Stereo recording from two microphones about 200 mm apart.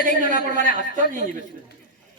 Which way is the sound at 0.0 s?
40° right (ahead or behind).